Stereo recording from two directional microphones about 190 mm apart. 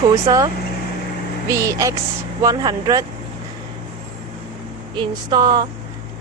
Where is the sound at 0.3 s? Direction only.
20° right (ahead or behind).